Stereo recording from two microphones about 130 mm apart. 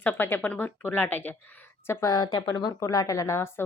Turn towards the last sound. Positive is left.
turn(degrees=20)  # may be behind; listen again after turning